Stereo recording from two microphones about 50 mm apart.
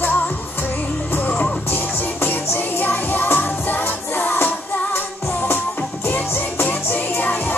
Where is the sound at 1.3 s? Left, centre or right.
Left.